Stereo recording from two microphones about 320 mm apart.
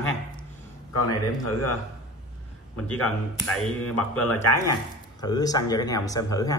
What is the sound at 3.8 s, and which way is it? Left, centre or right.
Speech, left.